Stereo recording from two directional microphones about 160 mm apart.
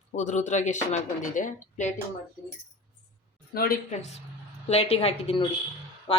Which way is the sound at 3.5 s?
70° left (ahead or behind).